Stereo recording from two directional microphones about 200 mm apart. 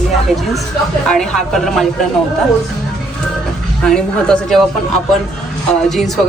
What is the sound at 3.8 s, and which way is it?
Speech, 5° left (ahead or behind).